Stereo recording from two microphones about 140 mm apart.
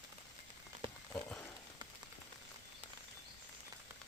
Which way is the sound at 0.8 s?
35° right (ahead or behind).